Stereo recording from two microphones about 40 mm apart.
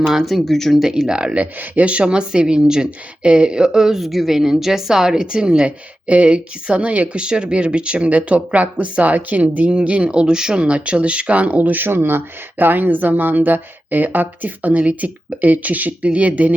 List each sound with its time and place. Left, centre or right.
0.0 s speech: centre
0.8 s a woman's voice: centre
5.6 s speech: right
7.2 s speech: right
11.8 s speech: right
14.8 s speech: right